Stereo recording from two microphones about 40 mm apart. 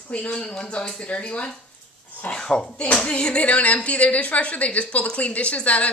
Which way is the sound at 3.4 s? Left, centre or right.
Left.